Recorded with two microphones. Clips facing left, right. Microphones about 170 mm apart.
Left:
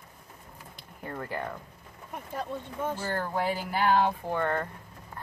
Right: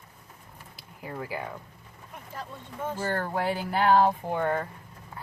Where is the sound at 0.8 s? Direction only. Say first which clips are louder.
Right 1 dB; 5° right (ahead or behind).